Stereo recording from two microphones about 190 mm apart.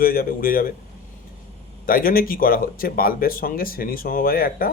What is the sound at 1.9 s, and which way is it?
Speech, 50° left (ahead or behind).